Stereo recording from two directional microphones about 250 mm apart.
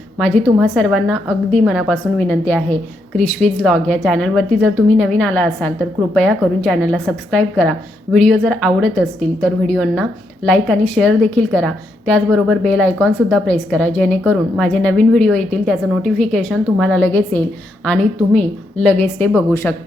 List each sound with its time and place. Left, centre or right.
0.2 s a woman's voice: centre